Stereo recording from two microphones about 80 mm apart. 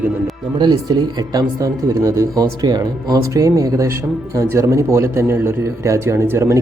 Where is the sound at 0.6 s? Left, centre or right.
Right.